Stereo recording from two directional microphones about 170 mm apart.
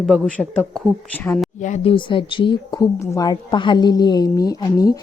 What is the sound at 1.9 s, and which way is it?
Speech, 30° left (ahead or behind).